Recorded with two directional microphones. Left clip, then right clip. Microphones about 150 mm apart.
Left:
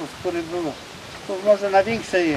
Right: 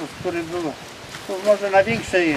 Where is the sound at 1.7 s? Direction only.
Centre (ahead or behind).